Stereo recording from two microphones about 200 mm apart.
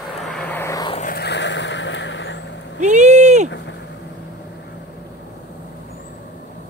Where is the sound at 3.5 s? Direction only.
60° left (ahead or behind).